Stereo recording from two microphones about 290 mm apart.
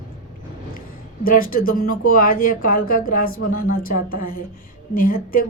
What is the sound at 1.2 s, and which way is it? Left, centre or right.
Speech, left.